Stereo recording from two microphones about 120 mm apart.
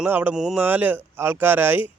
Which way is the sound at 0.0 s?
15° right (ahead or behind).